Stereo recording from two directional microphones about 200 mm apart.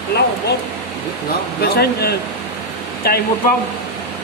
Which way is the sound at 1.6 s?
55° left (ahead or behind).